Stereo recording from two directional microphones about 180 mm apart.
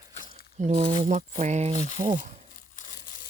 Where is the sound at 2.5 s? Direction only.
45° left (ahead or behind).